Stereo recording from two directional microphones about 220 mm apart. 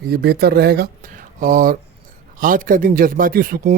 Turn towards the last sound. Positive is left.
turn(degrees=-40)  # may be behind; listen again after turning